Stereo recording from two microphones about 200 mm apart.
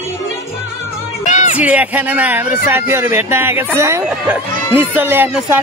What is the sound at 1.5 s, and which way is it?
Speech, 5° right (ahead or behind).